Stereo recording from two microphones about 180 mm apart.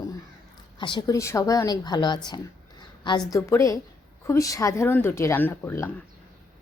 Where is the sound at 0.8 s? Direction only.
25° left (ahead or behind).